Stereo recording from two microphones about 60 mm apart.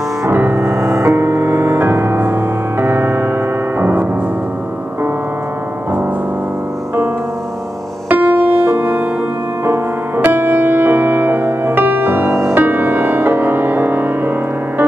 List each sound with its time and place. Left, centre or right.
0.2 s music: right
8.1 s music: right